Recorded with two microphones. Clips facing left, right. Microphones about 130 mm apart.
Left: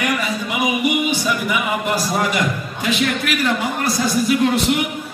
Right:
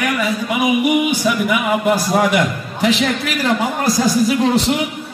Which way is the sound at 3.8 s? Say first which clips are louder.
Right 3 dB; 90° right.